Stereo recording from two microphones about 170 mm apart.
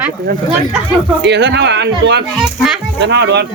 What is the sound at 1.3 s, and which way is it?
Speech, 90° right.